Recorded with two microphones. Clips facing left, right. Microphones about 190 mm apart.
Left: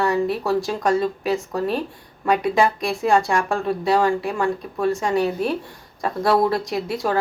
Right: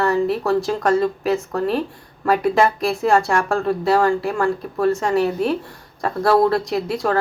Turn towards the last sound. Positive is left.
turn(degrees=0)  # may be behind; listen again after turning